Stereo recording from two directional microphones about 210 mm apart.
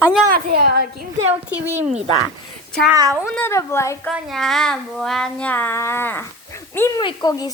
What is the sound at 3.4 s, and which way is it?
Child singing, 10° left (ahead or behind).